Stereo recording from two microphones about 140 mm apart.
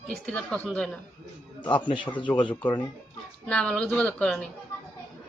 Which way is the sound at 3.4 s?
5° left (ahead or behind).